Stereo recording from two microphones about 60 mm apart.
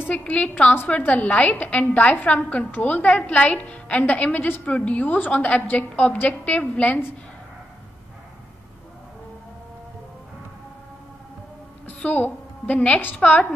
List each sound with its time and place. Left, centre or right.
0.3 s a woman's voice: left
11.8 s a woman's voice: left